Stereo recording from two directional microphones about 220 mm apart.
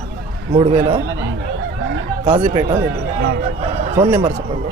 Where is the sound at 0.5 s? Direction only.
25° right (ahead or behind).